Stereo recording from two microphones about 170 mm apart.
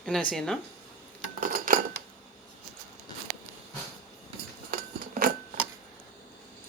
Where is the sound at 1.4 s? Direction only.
55° right (ahead or behind).